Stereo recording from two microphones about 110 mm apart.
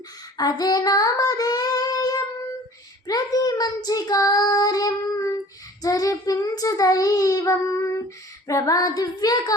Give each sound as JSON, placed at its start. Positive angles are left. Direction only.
{"t": 0.3, "sound": "child singing", "side_deg": 35}